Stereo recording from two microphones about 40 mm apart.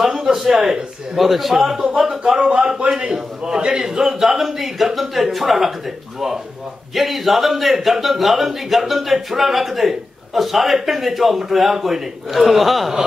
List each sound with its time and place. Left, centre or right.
0.0 s a man's voice: centre
7.0 s a man's voice: centre